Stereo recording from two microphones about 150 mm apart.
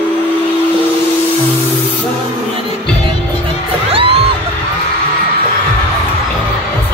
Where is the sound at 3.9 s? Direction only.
40° right (ahead or behind).